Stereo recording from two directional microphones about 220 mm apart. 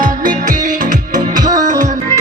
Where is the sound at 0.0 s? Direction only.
40° right (ahead or behind).